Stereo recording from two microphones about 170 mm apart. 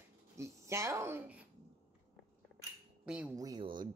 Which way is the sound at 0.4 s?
15° right (ahead or behind).